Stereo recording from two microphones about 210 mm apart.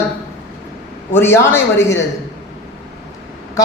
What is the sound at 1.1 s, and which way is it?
Speech, 10° left (ahead or behind).